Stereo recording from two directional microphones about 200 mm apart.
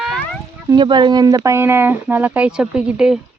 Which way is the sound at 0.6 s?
20° right (ahead or behind).